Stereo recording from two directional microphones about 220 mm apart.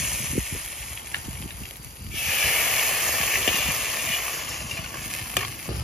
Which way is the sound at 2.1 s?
Centre (ahead or behind).